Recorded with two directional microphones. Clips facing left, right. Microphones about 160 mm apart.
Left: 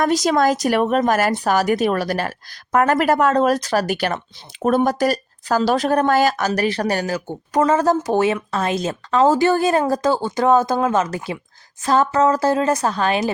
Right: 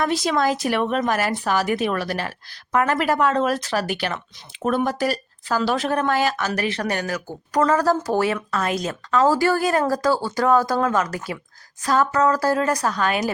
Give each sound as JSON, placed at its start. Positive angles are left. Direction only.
{"t": 0.0, "sound": "a woman's voice", "side_deg": 40}